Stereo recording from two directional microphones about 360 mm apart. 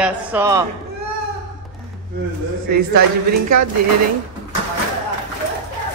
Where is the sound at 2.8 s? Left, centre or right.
Right.